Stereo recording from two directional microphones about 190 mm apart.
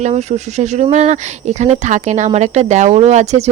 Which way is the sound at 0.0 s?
35° right (ahead or behind).